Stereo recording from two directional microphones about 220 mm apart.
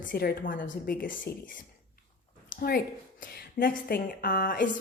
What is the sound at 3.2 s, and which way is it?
A woman's voice, 40° left (ahead or behind).